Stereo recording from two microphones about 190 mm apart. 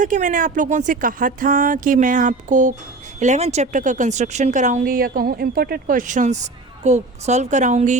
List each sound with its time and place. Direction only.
0.0 s speech: 40° right (ahead or behind)